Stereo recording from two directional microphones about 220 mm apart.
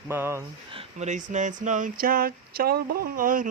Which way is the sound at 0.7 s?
30° right (ahead or behind).